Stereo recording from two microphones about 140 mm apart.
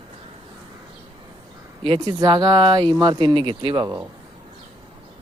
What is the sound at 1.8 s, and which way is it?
Speech, 35° right (ahead or behind).